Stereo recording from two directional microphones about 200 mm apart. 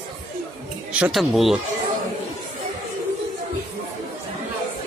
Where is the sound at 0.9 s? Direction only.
5° right (ahead or behind).